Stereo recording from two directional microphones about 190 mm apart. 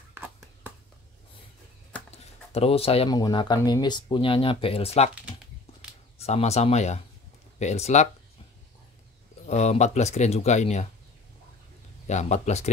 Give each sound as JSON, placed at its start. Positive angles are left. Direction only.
{"t": 0.1, "sound": "a sound", "side_deg": -10}
{"t": 2.0, "sound": "speech", "side_deg": 35}
{"t": 6.1, "sound": "speech", "side_deg": 35}
{"t": 9.5, "sound": "speech", "side_deg": 35}
{"t": 12.1, "sound": "speech", "side_deg": 35}